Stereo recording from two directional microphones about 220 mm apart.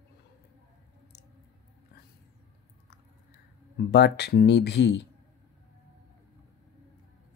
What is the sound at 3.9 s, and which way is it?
Speech, 50° left (ahead or behind).